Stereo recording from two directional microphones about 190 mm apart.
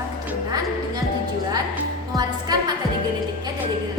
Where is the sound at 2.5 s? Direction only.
20° right (ahead or behind).